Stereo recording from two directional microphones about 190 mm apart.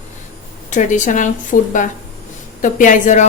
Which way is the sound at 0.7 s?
40° left (ahead or behind).